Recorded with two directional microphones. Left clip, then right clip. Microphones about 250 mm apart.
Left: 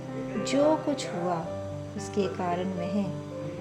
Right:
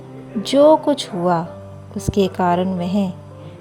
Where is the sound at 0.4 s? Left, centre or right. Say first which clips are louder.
Right 13 dB; right.